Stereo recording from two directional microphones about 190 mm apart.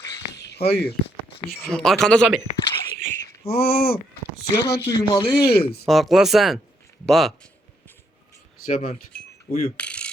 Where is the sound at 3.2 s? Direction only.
55° left (ahead or behind).